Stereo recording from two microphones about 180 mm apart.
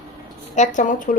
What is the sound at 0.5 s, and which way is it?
Speech, 45° left (ahead or behind).